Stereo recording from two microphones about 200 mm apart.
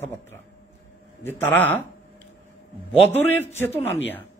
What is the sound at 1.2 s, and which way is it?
Speech, 10° left (ahead or behind).